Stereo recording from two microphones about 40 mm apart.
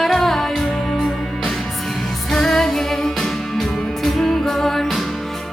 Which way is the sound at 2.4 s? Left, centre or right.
Centre.